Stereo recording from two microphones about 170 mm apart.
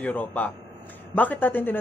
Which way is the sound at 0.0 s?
10° left (ahead or behind).